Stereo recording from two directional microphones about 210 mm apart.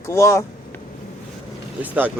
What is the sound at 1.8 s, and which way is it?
Speech, 10° right (ahead or behind).